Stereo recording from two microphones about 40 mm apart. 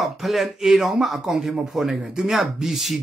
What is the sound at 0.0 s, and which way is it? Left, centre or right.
Speech, centre.